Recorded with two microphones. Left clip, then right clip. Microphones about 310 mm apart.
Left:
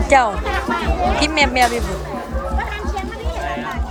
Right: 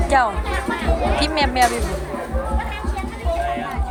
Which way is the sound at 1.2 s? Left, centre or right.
Centre.